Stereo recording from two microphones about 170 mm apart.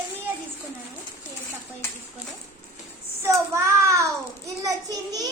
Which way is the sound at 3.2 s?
15° right (ahead or behind).